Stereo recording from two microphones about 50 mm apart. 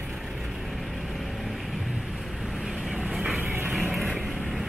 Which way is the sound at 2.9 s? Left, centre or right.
Centre.